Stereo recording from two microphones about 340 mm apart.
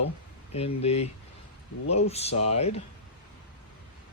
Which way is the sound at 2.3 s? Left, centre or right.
Left.